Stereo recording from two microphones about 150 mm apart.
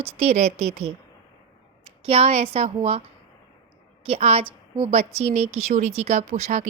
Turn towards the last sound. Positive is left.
turn(degrees=-50)  # may be behind; listen again after turning